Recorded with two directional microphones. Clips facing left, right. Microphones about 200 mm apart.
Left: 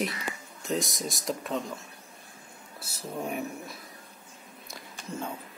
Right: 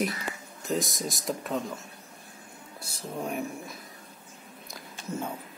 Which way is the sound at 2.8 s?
Centre (ahead or behind).